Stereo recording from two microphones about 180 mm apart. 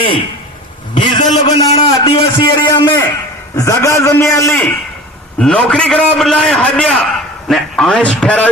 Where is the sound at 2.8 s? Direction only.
15° left (ahead or behind).